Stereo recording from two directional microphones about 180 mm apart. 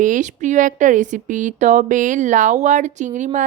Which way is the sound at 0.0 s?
45° right (ahead or behind).